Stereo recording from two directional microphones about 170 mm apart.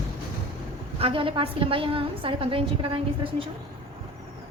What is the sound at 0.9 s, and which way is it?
A woman's voice, 35° right (ahead or behind).